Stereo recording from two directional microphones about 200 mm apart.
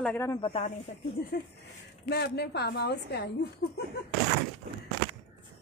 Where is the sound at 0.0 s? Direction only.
10° left (ahead or behind).